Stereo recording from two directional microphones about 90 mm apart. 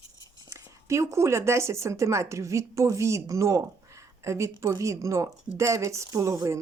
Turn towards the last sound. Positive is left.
turn(degrees=-35)  # may be behind; listen again after turning